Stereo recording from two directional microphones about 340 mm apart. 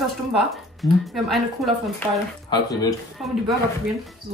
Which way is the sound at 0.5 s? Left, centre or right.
Centre.